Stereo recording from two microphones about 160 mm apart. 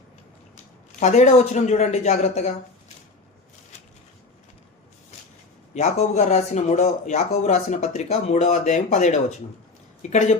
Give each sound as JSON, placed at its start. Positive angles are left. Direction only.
{"t": 0.9, "sound": "speech", "side_deg": 45}
{"t": 5.7, "sound": "speech", "side_deg": 45}